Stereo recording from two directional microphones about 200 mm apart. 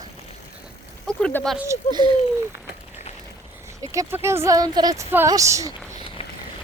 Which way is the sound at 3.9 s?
15° right (ahead or behind).